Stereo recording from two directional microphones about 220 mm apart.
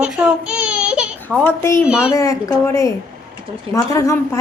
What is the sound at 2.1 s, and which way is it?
A woman's voice, 15° left (ahead or behind).